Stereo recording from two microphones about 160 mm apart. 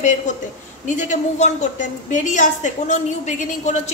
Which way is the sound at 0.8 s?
50° left (ahead or behind).